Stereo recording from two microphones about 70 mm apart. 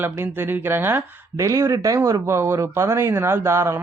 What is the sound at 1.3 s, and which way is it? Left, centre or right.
Speech, right.